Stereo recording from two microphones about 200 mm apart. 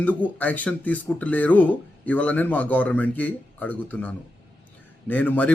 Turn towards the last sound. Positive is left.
turn(degrees=5)  # may be behind; listen again after turning